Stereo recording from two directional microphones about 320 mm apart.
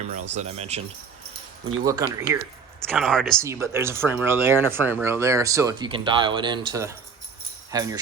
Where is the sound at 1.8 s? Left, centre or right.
Centre.